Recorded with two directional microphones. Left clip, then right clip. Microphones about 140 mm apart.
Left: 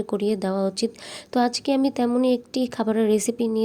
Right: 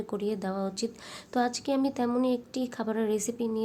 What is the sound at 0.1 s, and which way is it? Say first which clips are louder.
A woman's voice: left 8 dB; 40° left (ahead or behind).